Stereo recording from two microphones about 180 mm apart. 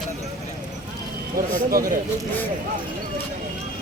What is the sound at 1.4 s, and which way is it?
Speech, 50° right (ahead or behind).